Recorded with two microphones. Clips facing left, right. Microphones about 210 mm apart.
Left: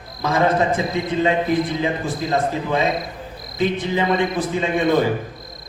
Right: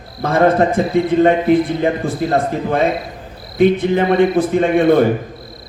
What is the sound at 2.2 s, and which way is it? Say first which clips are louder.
Speech: right 5 dB; 55° right (ahead or behind).